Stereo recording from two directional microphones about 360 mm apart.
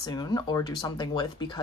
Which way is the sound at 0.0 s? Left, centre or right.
Centre.